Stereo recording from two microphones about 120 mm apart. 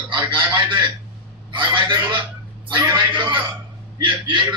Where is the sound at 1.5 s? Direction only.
40° right (ahead or behind).